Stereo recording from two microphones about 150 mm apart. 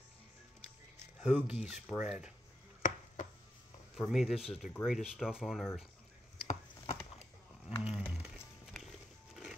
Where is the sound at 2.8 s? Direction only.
60° left (ahead or behind).